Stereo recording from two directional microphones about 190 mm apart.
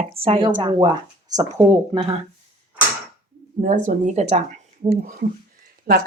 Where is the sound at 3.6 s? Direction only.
40° right (ahead or behind).